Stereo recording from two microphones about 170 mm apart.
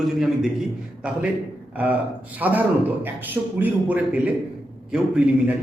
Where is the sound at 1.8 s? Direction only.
10° right (ahead or behind).